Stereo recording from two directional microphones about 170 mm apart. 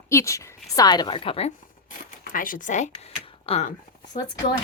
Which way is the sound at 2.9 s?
35° left (ahead or behind).